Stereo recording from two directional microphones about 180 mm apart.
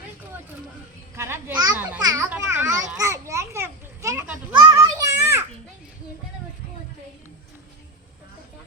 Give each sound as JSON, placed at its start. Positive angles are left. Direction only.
{"t": 1.1, "sound": "children playing", "side_deg": -15}
{"t": 1.7, "sound": "a sound", "side_deg": -10}
{"t": 2.0, "sound": "children playing", "side_deg": -20}